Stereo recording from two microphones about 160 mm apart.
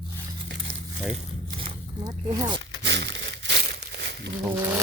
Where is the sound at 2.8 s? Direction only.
90° right.